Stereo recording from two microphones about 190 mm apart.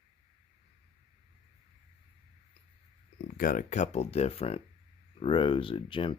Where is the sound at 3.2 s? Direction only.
50° left (ahead or behind).